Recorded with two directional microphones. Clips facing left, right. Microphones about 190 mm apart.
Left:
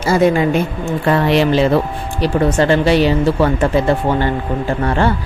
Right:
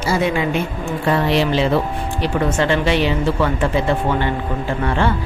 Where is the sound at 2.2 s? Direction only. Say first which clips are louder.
Left 5 dB; 35° left (ahead or behind).